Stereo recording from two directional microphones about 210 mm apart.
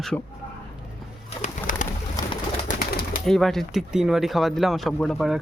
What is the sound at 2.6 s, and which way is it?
Bird, 40° left (ahead or behind).